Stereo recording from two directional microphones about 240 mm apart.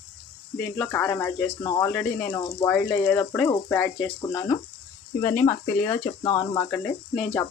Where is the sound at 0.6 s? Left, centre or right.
Centre.